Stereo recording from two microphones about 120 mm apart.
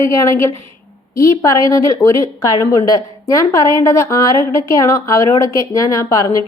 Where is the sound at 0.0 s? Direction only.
25° left (ahead or behind).